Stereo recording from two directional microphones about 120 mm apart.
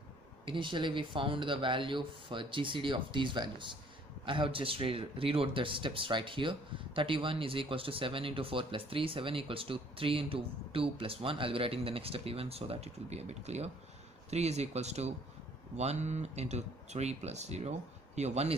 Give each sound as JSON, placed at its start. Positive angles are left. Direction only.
{"t": 0.5, "sound": "speech", "side_deg": -45}